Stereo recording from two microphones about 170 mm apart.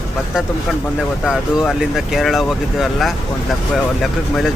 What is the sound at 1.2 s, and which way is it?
Speech, 5° right (ahead or behind).